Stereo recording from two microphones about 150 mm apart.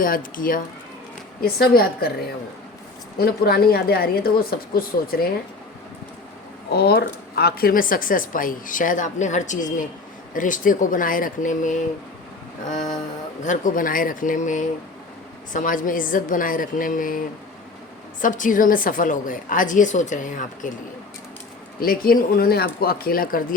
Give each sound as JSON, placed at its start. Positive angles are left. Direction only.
{"t": 0.0, "sound": "speech", "side_deg": 65}
{"t": 1.4, "sound": "speech", "side_deg": 85}
{"t": 3.2, "sound": "speech", "side_deg": 90}
{"t": 6.7, "sound": "a woman's voice", "side_deg": 90}
{"t": 13.4, "sound": "a woman's voice", "side_deg": 60}
{"t": 21.8, "sound": "speech", "side_deg": 75}